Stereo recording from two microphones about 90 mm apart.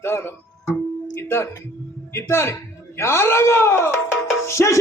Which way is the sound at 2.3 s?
30° left (ahead or behind).